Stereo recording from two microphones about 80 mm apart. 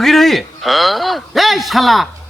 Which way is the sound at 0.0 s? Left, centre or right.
Centre.